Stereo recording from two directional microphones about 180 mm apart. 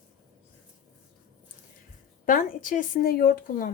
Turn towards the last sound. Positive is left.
turn(degrees=50)  # may be behind; listen again after turning